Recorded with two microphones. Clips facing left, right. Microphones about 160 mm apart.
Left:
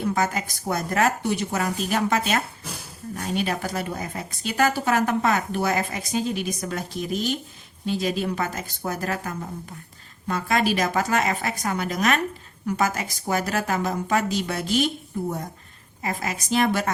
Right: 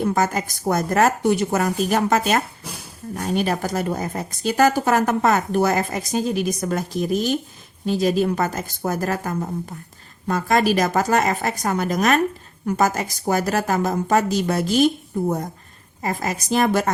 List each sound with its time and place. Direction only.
0.0 s speech: 45° right (ahead or behind)
16.0 s a woman's voice: 40° right (ahead or behind)